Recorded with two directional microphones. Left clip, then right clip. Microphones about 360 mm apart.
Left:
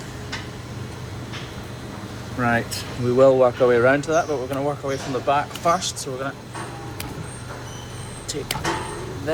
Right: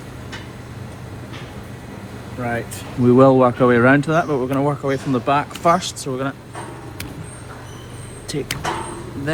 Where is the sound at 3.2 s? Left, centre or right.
Centre.